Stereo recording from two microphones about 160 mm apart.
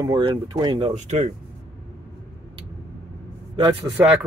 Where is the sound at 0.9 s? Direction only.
45° right (ahead or behind).